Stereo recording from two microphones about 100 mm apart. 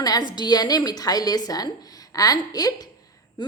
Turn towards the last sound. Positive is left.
turn(degrees=40)  # may be behind; listen again after turning